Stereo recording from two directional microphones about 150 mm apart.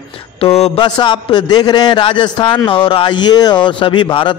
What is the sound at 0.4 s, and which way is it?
A man's voice, 40° left (ahead or behind).